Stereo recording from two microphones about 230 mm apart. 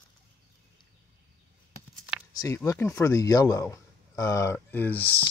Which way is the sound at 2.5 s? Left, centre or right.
Centre.